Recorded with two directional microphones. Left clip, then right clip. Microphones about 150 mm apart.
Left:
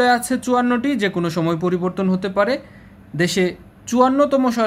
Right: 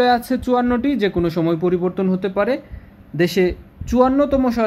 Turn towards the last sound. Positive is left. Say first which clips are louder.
# left 1 dB
turn(degrees=-10)  # may be behind; listen again after turning